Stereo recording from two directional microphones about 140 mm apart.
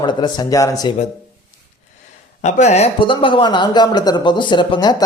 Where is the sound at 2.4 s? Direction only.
60° left (ahead or behind).